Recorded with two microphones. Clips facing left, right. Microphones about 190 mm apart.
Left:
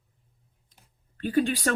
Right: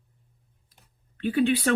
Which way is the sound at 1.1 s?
45° left (ahead or behind).